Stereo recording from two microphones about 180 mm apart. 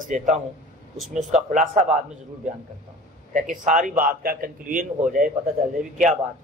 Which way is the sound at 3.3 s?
45° right (ahead or behind).